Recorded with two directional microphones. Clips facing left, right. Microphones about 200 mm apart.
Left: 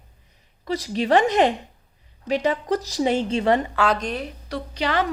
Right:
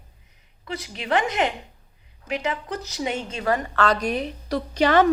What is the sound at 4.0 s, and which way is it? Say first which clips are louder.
Speech: right 3 dB; 10° right (ahead or behind).